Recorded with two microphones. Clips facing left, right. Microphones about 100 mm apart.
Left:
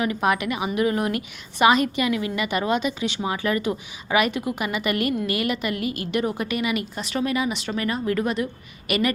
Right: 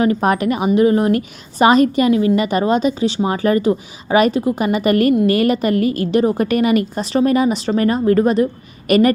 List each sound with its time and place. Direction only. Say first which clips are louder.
0.0 s a woman's voice: right 7 dB; 40° right (ahead or behind)